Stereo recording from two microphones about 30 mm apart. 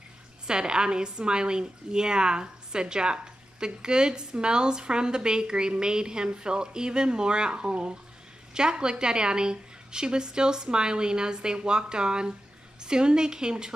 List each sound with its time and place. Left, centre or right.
0.5 s a woman's voice: right